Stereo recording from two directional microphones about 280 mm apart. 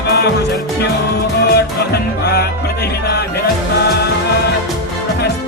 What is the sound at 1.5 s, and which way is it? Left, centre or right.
Music, left.